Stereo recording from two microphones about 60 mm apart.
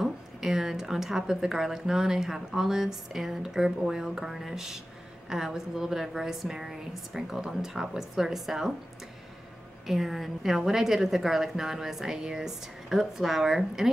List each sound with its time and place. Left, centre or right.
0.0 s a woman's voice: centre
9.8 s a woman's voice: centre